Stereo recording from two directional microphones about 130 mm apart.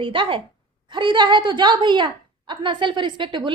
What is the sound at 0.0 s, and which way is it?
A woman's voice, 40° right (ahead or behind).